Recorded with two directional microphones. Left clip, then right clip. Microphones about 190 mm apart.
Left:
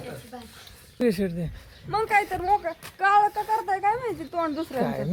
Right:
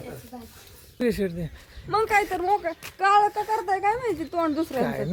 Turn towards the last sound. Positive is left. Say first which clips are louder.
# right 1 dB
turn(degrees=0)  # may be behind; listen again after turning